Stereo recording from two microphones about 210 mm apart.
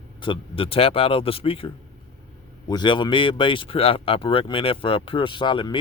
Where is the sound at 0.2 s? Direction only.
25° left (ahead or behind).